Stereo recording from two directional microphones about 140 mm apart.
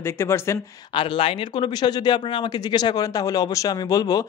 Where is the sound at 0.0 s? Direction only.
20° left (ahead or behind).